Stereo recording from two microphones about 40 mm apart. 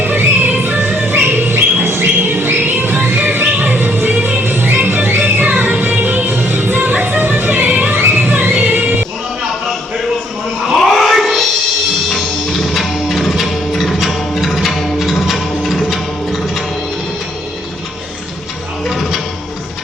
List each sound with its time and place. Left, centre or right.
0.0 s music: right
1.1 s bird: right
2.3 s a sound: right
2.7 s music: right
10.8 s a sound: centre
12.1 s music: centre
18.9 s music: centre